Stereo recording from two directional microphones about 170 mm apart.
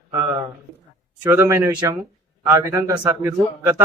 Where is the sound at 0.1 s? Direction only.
20° right (ahead or behind).